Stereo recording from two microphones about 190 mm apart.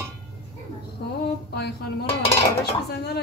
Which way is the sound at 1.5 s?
60° left (ahead or behind).